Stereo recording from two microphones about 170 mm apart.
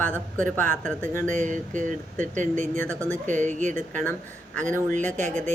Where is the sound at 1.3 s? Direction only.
45° right (ahead or behind).